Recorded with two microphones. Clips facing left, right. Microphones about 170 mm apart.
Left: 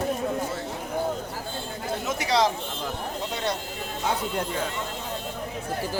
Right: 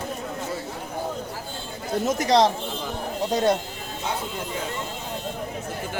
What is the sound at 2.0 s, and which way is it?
Speech, 40° right (ahead or behind).